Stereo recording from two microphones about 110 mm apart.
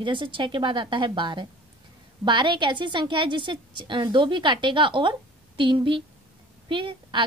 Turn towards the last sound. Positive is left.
turn(degrees=-50)  # may be behind; listen again after turning